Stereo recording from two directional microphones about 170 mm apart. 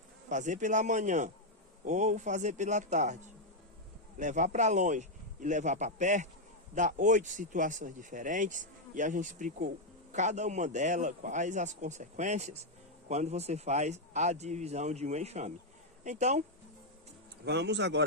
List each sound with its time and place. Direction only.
0.3 s speech: 45° right (ahead or behind)
4.2 s speech: 45° right (ahead or behind)
17.4 s speech: 85° right